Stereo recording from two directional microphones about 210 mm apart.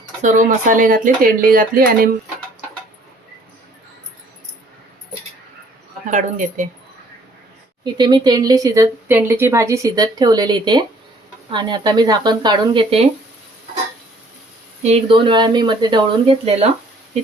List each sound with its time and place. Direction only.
0.2 s speech: 35° right (ahead or behind)
6.1 s speech: 35° right (ahead or behind)
7.9 s speech: 20° right (ahead or behind)
14.8 s speech: 25° right (ahead or behind)